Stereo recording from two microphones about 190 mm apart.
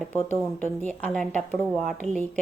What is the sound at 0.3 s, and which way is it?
Speech, 10° left (ahead or behind).